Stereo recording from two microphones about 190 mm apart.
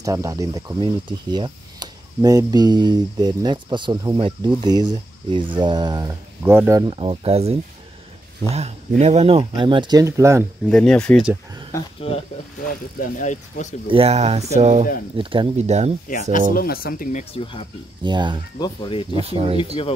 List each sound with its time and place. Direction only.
0.0 s speech: 15° right (ahead or behind)
6.9 s speech: 30° right (ahead or behind)
10.7 s speech: 5° left (ahead or behind)
12.6 s speech: 45° left (ahead or behind)
13.8 s speech: 30° right (ahead or behind)
16.1 s speech: 45° left (ahead or behind)
17.2 s speech: 30° left (ahead or behind)
18.0 s speech: 25° right (ahead or behind)
18.6 s speech: 25° left (ahead or behind)
19.1 s speech: 30° right (ahead or behind)